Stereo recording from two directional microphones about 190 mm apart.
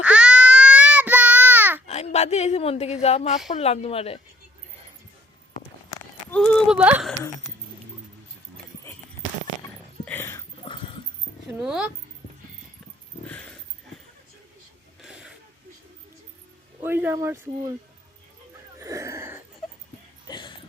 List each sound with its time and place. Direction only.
0.0 s child singing: 5° right (ahead or behind)
1.9 s a man's voice: 35° left (ahead or behind)
6.3 s speech: 5° left (ahead or behind)
7.2 s a sound: 20° left (ahead or behind)
10.1 s dog: 10° left (ahead or behind)
10.6 s dog: 25° left (ahead or behind)
11.6 s speech: 5° right (ahead or behind)
13.2 s dog: 10° left (ahead or behind)
15.0 s a sound: 5° right (ahead or behind)
16.8 s speech: 10° right (ahead or behind)
18.8 s wheeze: 15° right (ahead or behind)
20.2 s a sound: 25° left (ahead or behind)